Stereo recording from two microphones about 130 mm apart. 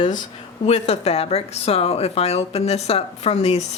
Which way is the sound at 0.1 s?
70° left (ahead or behind).